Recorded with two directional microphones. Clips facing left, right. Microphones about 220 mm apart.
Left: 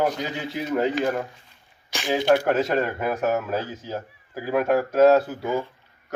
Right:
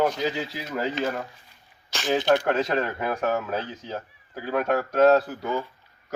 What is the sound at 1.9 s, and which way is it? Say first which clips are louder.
A man's voice: left 2 dB; 10° left (ahead or behind).